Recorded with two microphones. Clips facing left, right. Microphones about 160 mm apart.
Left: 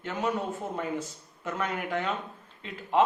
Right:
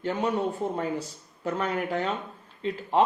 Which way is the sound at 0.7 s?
35° right (ahead or behind).